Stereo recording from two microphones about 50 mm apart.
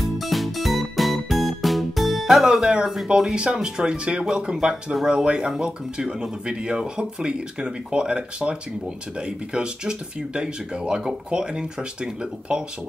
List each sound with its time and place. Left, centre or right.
0.0 s music: centre
2.4 s speech: centre